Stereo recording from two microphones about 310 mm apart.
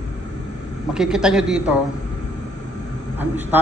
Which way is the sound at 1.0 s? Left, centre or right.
Centre.